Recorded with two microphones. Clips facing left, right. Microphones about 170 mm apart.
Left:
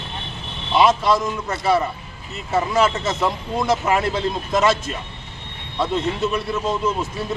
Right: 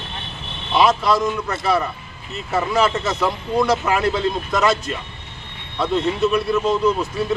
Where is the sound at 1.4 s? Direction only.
25° left (ahead or behind).